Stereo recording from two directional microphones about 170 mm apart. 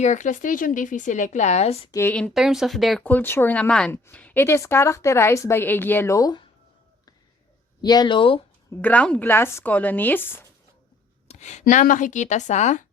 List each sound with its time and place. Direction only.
0.0 s speech: 45° left (ahead or behind)
1.9 s a woman's voice: 15° left (ahead or behind)
2.3 s a woman's voice: centre (ahead or behind); by 6.4 s 20° left (ahead or behind)
7.8 s speech: 25° left (ahead or behind)
8.7 s a woman's voice: 10° left (ahead or behind)
11.3 s a sound: 45° left (ahead or behind)
11.6 s speech: 50° left (ahead or behind)